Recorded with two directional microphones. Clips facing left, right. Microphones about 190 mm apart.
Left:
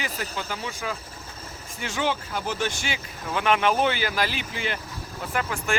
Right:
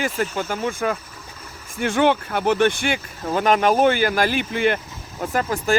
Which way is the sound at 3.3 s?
40° right (ahead or behind).